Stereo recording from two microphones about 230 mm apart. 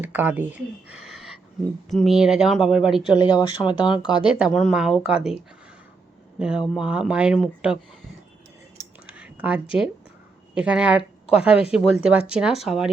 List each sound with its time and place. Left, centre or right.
0.0 s a woman's voice: centre
3.2 s speech: centre
4.4 s a woman's voice: centre
6.4 s a woman's voice: centre
9.0 s a sound: centre
10.5 s a woman's voice: centre